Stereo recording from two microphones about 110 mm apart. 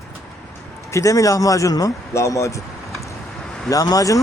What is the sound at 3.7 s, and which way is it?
Speech, 35° left (ahead or behind).